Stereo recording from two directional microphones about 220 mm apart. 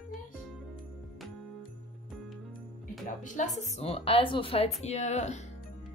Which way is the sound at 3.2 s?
35° left (ahead or behind).